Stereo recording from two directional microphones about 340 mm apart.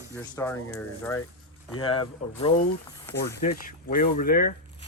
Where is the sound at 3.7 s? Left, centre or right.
Left.